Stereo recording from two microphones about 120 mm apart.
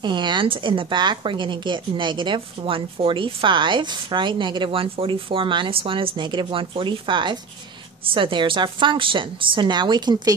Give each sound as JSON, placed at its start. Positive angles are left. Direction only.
{"t": 0.0, "sound": "a woman's voice", "side_deg": -40}